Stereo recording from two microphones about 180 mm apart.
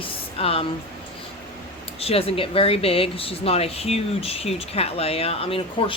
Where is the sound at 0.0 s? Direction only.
30° left (ahead or behind).